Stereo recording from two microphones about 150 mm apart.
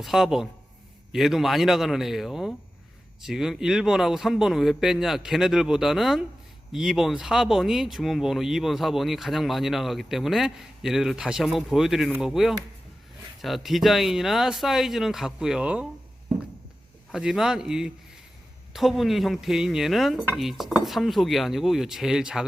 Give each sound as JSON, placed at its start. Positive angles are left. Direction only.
{"t": 0.0, "sound": "speech", "side_deg": 0}
{"t": 17.1, "sound": "speech", "side_deg": -5}